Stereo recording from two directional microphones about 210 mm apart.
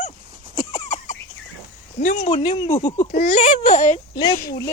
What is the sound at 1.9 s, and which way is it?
Speech, 35° left (ahead or behind).